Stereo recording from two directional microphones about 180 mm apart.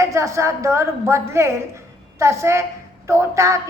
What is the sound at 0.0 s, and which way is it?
A woman's voice, 15° right (ahead or behind).